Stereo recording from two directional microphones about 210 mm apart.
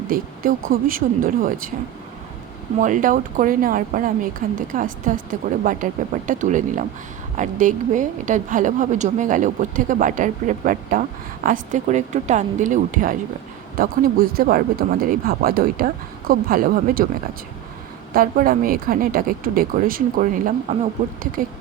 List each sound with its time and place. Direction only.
0.1 s a woman's voice: 40° right (ahead or behind)
2.8 s a woman's voice: 40° right (ahead or behind)
18.1 s speech: 45° right (ahead or behind)